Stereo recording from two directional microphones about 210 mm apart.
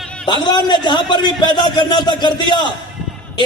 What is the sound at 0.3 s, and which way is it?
A man's voice, 20° left (ahead or behind).